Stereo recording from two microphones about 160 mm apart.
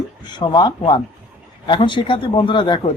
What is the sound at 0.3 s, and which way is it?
A man's voice, 25° left (ahead or behind).